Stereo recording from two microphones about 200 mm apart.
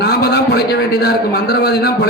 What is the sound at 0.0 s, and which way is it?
A man's voice, 55° left (ahead or behind).